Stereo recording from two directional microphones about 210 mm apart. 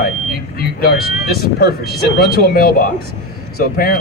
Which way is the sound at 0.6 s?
45° left (ahead or behind).